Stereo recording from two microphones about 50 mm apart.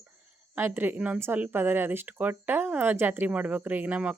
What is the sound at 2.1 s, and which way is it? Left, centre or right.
Speech, right.